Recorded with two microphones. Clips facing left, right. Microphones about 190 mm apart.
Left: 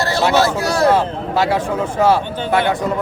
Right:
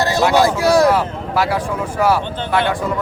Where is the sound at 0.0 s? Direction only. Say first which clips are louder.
Right 1 dB; 15° right (ahead or behind).